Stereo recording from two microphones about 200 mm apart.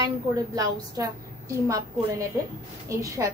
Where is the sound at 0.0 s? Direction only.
15° right (ahead or behind).